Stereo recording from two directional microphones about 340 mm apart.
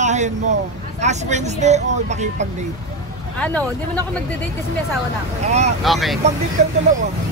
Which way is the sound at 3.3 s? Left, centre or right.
Centre.